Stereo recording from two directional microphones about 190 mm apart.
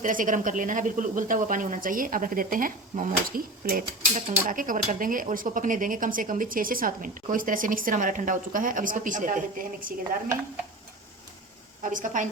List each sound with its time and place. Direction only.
0.0 s speech: 45° right (ahead or behind)
11.8 s speech: 45° right (ahead or behind)